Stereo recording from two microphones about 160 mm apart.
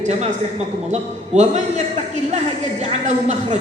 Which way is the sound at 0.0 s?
45° right (ahead or behind).